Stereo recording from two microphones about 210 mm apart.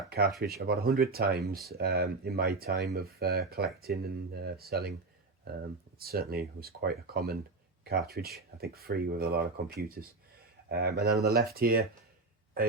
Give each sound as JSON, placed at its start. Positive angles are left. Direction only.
{"t": 0.4, "sound": "speech", "side_deg": -45}
{"t": 6.0, "sound": "speech", "side_deg": -45}